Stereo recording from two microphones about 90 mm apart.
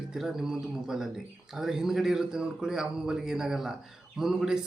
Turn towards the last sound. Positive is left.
turn(degrees=-5)  # may be behind; listen again after turning